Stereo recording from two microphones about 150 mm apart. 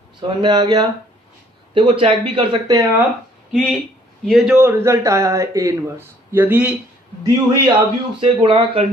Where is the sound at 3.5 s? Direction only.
Centre (ahead or behind).